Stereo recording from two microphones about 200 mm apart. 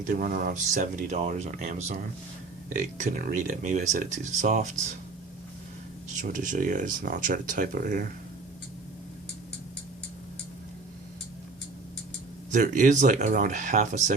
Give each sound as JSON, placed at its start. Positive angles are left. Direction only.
{"t": 0.0, "sound": "speech", "side_deg": -45}
{"t": 6.1, "sound": "speech", "side_deg": -40}
{"t": 12.5, "sound": "speech", "side_deg": -40}